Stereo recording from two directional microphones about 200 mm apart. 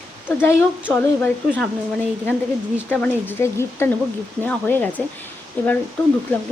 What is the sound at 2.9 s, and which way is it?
Speech, 10° left (ahead or behind).